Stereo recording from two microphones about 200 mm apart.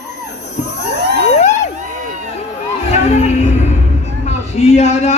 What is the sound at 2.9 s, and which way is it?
Music, 30° left (ahead or behind).